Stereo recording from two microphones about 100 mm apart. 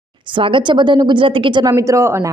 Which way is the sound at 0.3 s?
55° right (ahead or behind).